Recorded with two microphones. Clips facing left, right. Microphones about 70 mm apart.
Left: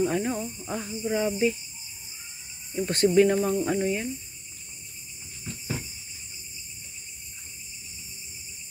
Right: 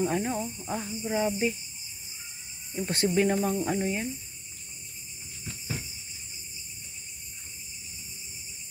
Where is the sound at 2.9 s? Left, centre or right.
Centre.